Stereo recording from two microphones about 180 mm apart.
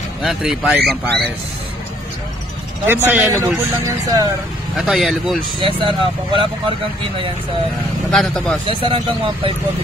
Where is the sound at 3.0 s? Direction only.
10° right (ahead or behind).